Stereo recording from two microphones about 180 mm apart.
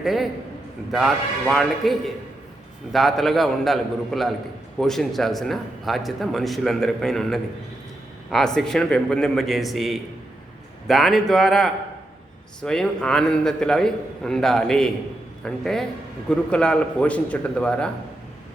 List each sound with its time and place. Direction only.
0.0 s a man's voice: centre (ahead or behind)